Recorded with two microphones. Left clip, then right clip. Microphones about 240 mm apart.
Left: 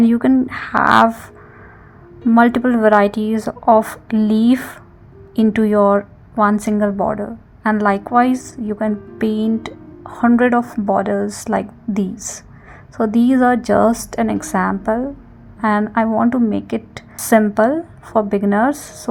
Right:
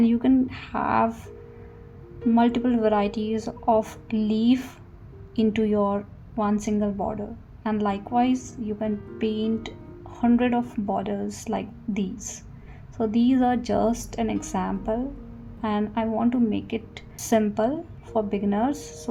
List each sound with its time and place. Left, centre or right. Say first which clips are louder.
0.0 s speech: left 7 dB; left
2.3 s a woman's voice: left 9 dB; left